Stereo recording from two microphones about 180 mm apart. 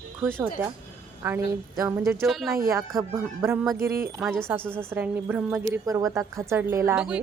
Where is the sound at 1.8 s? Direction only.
15° right (ahead or behind).